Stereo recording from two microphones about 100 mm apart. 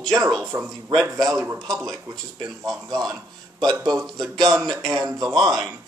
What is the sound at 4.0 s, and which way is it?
Speech, 5° left (ahead or behind).